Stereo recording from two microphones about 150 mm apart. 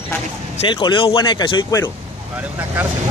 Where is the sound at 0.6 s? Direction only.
35° left (ahead or behind).